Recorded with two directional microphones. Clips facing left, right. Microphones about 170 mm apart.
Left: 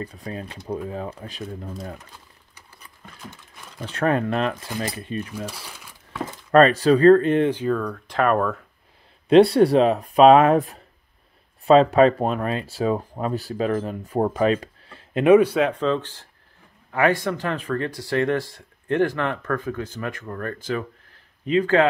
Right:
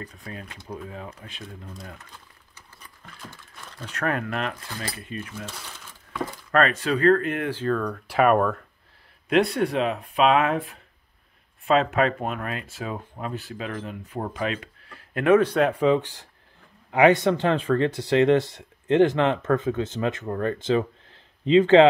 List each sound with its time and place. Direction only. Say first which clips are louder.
0.0 s speech: left 6 dB; 35° left (ahead or behind)
3.2 s a sound: left 1 dB; 15° left (ahead or behind)
3.8 s speech: left 6 dB; 30° left (ahead or behind)
4.6 s speech: left 6 dB; 20° left (ahead or behind)
4.9 s speech: left 5 dB; 30° left (ahead or behind)
5.3 s speech: left 5 dB; 10° left (ahead or behind)
6.5 s speech: left 8 dB; 35° left (ahead or behind)
7.5 s speech: left 1 dB; 5° left (ahead or behind)
8.1 s speech: right 1 dB; 5° right (ahead or behind)
9.3 s speech: left 8 dB; 30° left (ahead or behind); by 15.5 s 15° left (ahead or behind)
15.7 s speech: right 2 dB; 10° right (ahead or behind)